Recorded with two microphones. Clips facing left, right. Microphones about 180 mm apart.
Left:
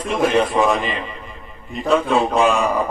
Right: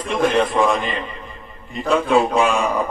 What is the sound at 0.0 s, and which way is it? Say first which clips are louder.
A man's voice: left 1 dB; 5° left (ahead or behind).